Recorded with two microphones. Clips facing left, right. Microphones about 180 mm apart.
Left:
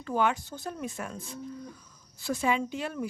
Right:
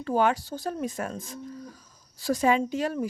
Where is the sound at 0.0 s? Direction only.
35° right (ahead or behind).